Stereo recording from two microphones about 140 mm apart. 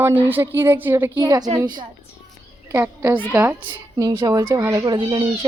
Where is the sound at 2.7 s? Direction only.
20° right (ahead or behind).